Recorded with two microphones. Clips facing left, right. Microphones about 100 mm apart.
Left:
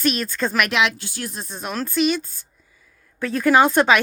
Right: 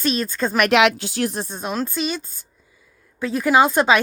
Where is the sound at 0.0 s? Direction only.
25° right (ahead or behind).